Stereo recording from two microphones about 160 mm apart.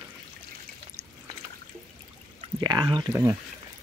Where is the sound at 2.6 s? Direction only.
25° right (ahead or behind).